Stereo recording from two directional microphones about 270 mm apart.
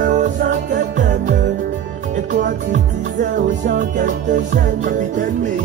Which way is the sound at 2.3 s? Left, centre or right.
Right.